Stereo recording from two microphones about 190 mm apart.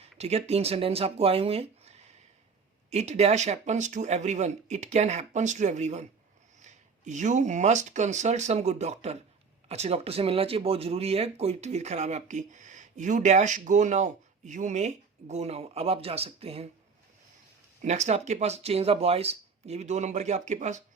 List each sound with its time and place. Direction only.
0.2 s speech: 35° right (ahead or behind)
17.8 s speech: 35° right (ahead or behind)